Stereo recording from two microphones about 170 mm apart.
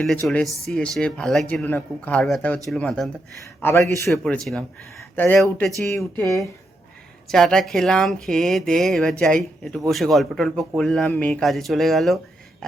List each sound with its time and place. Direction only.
0.0 s speech: centre (ahead or behind)
4.1 s speech: centre (ahead or behind); by 6.4 s 15° left (ahead or behind)
7.3 s speech: centre (ahead or behind)